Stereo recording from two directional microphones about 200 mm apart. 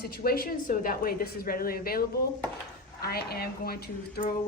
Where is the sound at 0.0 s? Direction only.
50° left (ahead or behind).